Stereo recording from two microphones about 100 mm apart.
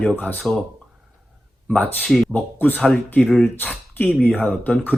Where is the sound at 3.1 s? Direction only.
5° left (ahead or behind).